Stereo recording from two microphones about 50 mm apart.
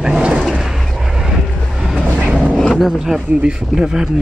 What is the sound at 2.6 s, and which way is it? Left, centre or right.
Roaring cats, centre.